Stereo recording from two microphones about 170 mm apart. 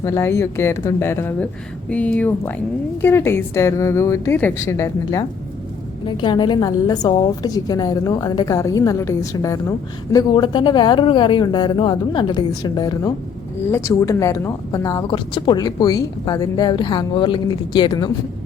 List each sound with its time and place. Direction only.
0.0 s a woman's voice: 15° left (ahead or behind)
6.1 s a woman's voice: 25° left (ahead or behind)